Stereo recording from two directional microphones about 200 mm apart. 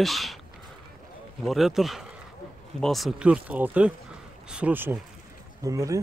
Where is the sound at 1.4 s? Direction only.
Centre (ahead or behind).